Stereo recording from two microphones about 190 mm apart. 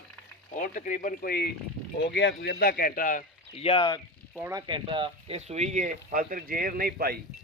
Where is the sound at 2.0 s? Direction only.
65° left (ahead or behind); by 3.2 s 45° left (ahead or behind).